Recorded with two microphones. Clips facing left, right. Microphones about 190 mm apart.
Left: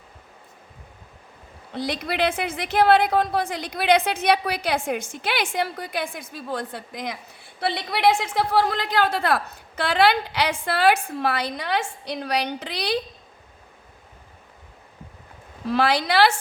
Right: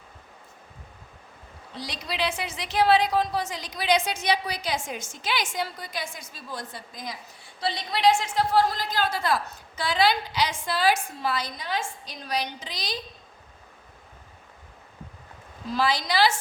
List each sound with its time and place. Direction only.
1.7 s a woman's voice: 55° left (ahead or behind)
15.6 s a woman's voice: 65° left (ahead or behind)